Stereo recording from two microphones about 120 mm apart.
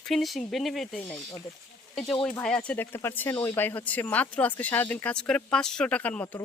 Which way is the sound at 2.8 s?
20° left (ahead or behind).